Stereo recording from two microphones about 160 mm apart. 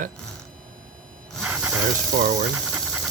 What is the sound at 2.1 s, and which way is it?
Speech, 50° right (ahead or behind).